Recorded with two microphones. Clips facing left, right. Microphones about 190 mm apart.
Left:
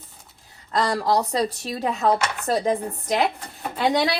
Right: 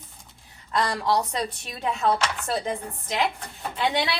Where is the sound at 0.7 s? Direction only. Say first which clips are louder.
Left 3 dB; 35° left (ahead or behind).